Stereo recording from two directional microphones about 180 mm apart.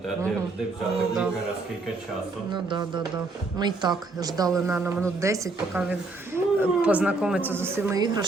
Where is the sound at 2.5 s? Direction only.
25° right (ahead or behind).